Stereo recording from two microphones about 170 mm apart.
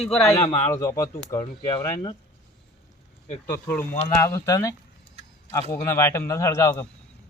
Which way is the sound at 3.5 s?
10° left (ahead or behind).